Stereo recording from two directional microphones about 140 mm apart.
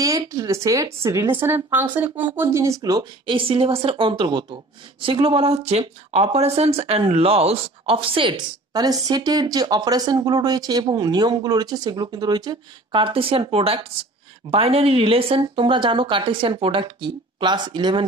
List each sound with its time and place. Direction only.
0.0 s speech: 25° right (ahead or behind)